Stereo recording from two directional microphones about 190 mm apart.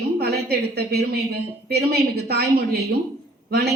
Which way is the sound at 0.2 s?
55° right (ahead or behind).